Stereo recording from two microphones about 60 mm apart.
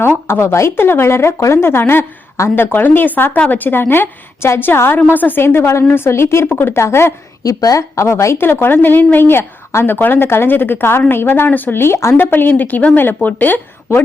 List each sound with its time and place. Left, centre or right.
0.3 s speech: left
0.8 s speech: left
1.8 s a woman's voice: left
7.4 s a woman's voice: left
8.4 s a woman's voice: left
12.1 s a woman's voice: left